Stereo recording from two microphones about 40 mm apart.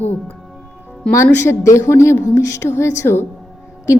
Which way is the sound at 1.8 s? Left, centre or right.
Left.